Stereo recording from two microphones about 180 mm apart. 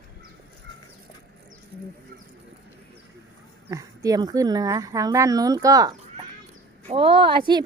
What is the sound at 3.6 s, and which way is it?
Speech, 20° right (ahead or behind).